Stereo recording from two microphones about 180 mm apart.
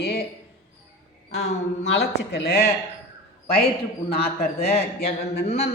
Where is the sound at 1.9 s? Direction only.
65° left (ahead or behind).